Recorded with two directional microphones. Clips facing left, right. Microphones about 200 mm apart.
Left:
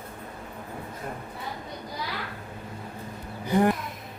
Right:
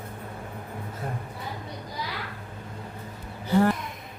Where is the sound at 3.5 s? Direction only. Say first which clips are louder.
Even; 15° left (ahead or behind).